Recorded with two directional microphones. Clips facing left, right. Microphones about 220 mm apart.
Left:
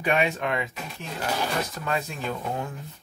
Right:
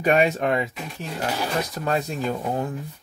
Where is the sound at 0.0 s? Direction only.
40° right (ahead or behind).